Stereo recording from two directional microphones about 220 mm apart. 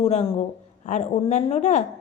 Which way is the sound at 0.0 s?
30° left (ahead or behind).